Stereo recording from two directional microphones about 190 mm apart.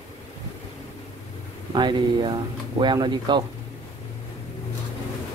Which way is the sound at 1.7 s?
25° right (ahead or behind).